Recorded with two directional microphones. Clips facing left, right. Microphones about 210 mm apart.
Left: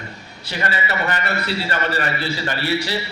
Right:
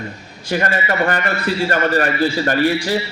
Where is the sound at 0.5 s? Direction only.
45° right (ahead or behind).